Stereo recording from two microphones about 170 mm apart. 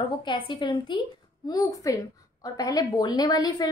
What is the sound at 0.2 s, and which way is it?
A woman's voice, 25° left (ahead or behind).